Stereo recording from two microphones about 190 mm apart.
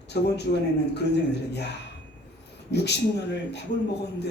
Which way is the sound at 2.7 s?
60° left (ahead or behind).